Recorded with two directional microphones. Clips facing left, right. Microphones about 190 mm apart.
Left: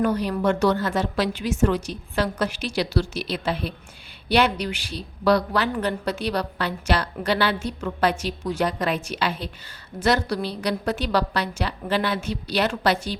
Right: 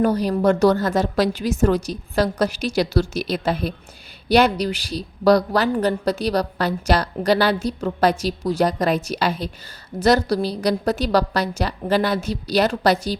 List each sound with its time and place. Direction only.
0.0 s a woman's voice: 40° right (ahead or behind)